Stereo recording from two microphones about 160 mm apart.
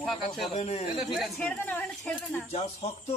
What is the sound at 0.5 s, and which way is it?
Speech, 40° left (ahead or behind).